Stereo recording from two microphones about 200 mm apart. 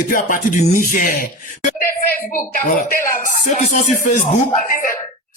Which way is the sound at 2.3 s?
40° left (ahead or behind).